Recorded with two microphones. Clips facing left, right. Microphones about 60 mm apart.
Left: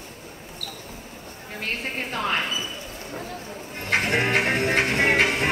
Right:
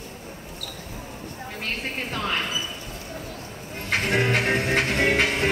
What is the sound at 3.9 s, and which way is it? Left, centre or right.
Music, left.